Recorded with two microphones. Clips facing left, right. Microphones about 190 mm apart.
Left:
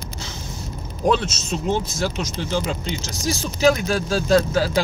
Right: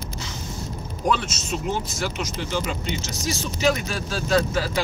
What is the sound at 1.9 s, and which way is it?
Speech, 35° left (ahead or behind).